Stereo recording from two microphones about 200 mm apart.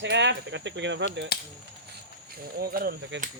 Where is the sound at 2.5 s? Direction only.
50° right (ahead or behind).